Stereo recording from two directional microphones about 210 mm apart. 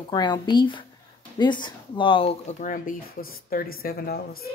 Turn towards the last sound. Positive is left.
turn(degrees=45)  # may be behind; listen again after turning